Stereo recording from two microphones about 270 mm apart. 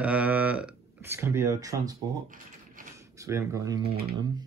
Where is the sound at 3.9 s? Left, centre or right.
Right.